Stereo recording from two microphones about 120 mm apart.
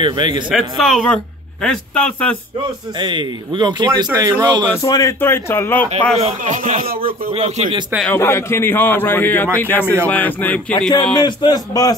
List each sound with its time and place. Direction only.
0.0 s a man's voice: 40° right (ahead or behind)
0.5 s speech: centre (ahead or behind)
3.0 s a man's voice: 40° right (ahead or behind)
4.8 s speech: 25° left (ahead or behind)
6.1 s a man's voice: 70° right (ahead or behind)
6.8 s speech: 50° right (ahead or behind); by 7.7 s 65° right (ahead or behind)
8.2 s a man's voice: 20° left (ahead or behind)
11.1 s speech: 35° left (ahead or behind)